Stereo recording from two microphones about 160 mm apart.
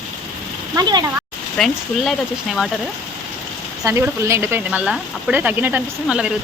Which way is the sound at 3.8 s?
15° right (ahead or behind).